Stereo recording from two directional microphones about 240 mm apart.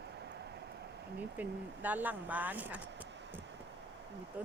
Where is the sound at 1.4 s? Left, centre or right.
Centre.